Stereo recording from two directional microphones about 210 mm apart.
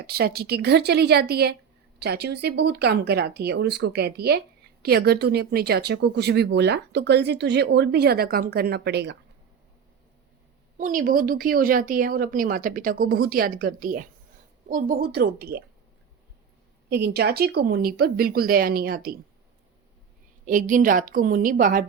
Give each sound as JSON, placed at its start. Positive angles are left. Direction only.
{"t": 0.0, "sound": "speech", "side_deg": -50}
{"t": 10.8, "sound": "speech", "side_deg": -40}
{"t": 16.9, "sound": "speech", "side_deg": -50}
{"t": 20.4, "sound": "a woman's voice", "side_deg": -40}